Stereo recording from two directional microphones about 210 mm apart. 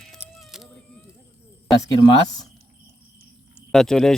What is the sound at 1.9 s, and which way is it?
Speech, 20° left (ahead or behind).